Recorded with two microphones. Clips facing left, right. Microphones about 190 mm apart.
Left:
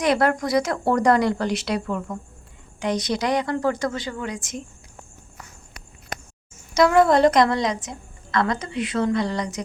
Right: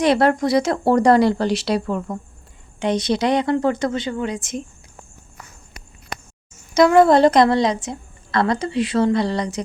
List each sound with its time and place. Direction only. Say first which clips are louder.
0.0 s a woman's voice: right 4 dB; 30° right (ahead or behind)
6.7 s a woman's voice: right 4 dB; 25° right (ahead or behind)